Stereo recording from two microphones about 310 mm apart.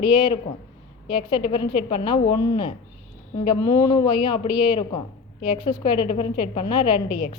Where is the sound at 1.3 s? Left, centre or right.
Centre.